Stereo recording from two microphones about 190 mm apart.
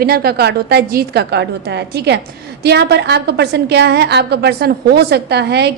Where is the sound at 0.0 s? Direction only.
55° right (ahead or behind).